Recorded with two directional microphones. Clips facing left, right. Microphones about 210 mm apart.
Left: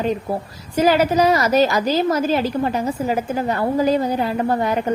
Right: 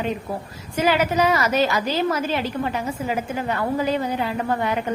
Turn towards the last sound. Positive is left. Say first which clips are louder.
# left 4 dB
turn(degrees=40)  # may be behind; listen again after turning